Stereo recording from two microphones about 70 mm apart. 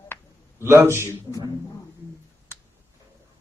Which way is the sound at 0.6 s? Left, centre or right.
Right.